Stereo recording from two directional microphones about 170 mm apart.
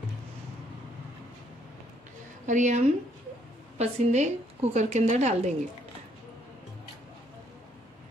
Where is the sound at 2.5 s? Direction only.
45° right (ahead or behind).